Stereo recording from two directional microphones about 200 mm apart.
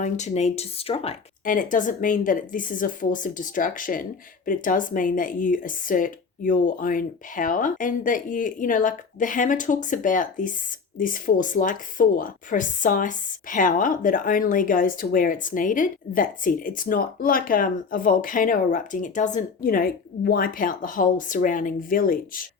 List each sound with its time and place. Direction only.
0.0 s speech: 35° left (ahead or behind)
1.5 s speech: 40° left (ahead or behind)